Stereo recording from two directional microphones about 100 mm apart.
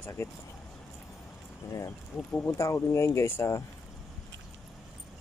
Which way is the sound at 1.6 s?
35° left (ahead or behind).